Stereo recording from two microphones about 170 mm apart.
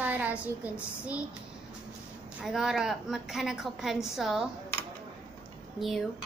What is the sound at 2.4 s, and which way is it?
A woman's voice, centre (ahead or behind).